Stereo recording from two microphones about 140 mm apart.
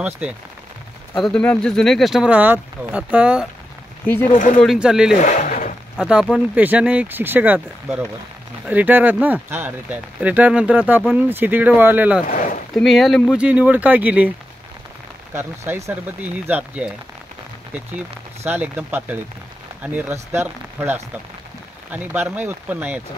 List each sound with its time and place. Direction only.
0.2 s speech: 5° right (ahead or behind)
1.2 s speech: 5° left (ahead or behind)
4.3 s speech: 80° left
4.6 s speech: 5° right (ahead or behind)
5.2 s a sound: 65° left (ahead or behind)
5.9 s speech: 5° right (ahead or behind)
12.3 s speech: 75° left (ahead or behind)
12.7 s speech: centre (ahead or behind)
15.3 s speech: 15° right (ahead or behind)
18.5 s speech: 10° right (ahead or behind)